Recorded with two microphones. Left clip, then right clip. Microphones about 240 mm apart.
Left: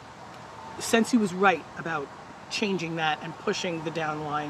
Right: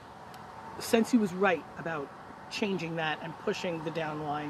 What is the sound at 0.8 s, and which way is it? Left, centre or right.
Speech, centre.